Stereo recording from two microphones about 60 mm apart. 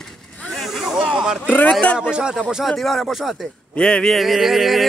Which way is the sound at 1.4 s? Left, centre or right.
Left.